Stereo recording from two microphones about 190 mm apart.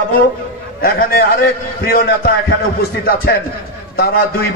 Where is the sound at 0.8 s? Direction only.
50° left (ahead or behind).